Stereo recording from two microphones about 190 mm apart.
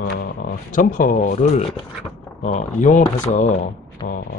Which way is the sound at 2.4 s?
40° left (ahead or behind).